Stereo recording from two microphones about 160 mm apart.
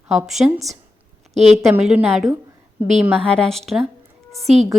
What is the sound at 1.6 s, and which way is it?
A woman's voice, 5° right (ahead or behind).